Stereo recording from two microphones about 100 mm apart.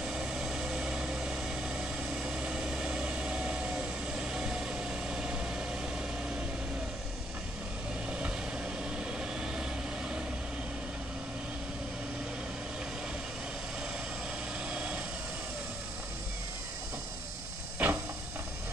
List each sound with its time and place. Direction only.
0.0 s vehicle: 5° right (ahead or behind)
8.9 s vehicle: 5° right (ahead or behind)
14.7 s vehicle: 10° right (ahead or behind)
17.8 s a sound: 15° right (ahead or behind)